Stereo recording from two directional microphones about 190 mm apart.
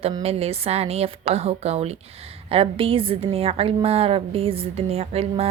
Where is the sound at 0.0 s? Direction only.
30° right (ahead or behind).